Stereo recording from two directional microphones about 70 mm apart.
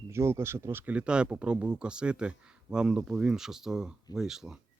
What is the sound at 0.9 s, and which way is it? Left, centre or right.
Speech, centre.